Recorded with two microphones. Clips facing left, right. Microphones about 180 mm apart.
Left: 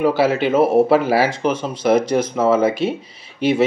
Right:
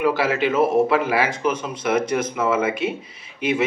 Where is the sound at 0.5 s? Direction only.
35° left (ahead or behind).